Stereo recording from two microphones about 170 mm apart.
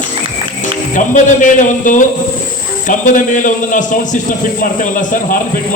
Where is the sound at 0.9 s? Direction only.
50° left (ahead or behind).